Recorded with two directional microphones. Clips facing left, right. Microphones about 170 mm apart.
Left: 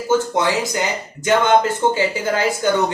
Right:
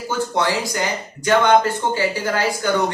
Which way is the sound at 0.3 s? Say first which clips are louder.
Left 2 dB; 20° left (ahead or behind).